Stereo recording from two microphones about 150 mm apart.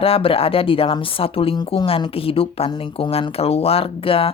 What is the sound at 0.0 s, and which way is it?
Speech, 40° left (ahead or behind).